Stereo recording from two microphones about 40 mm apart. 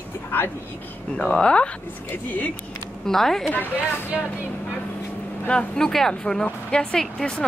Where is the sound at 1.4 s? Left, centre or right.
Left.